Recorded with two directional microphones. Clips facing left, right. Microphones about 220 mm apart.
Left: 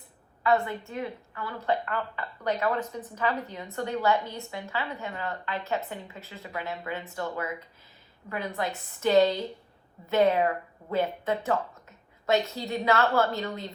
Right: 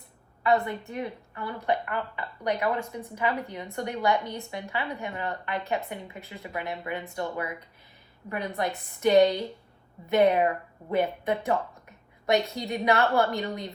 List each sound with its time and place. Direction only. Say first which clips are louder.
0.4 s speech: right 1 dB; 20° right (ahead or behind)